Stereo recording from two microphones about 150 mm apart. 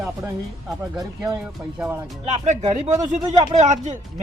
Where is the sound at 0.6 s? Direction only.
Centre (ahead or behind).